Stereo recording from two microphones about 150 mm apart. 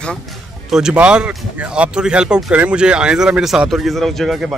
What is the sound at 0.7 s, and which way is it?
Speech, 5° right (ahead or behind).